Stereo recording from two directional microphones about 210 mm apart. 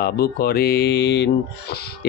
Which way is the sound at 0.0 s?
45° left (ahead or behind).